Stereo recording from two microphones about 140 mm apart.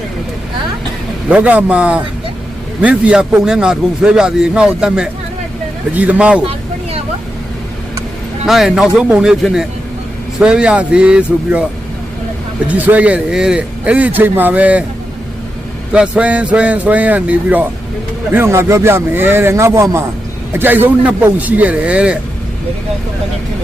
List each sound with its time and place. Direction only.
1.3 s a man's voice: 10° right (ahead or behind)
8.4 s a man's voice: centre (ahead or behind)
15.9 s a man's voice: 5° right (ahead or behind)